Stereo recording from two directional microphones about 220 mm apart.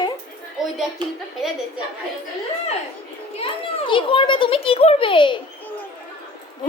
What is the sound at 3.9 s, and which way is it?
A child's voice, 20° left (ahead or behind).